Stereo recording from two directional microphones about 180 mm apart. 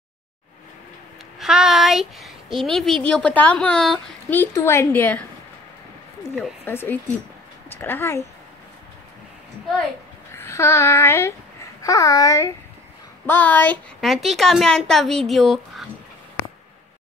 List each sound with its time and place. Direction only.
1.4 s speech: 5° right (ahead or behind)
6.6 s speech: 10° left (ahead or behind)
10.3 s a child's voice: 15° left (ahead or behind)